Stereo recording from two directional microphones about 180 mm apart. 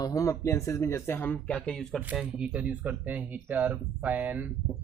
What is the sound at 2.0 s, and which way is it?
Speech, 5° right (ahead or behind).